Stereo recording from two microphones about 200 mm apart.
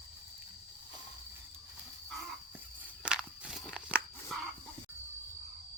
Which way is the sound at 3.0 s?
5° right (ahead or behind).